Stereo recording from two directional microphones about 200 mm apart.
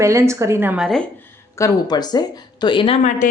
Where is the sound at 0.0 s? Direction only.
15° right (ahead or behind).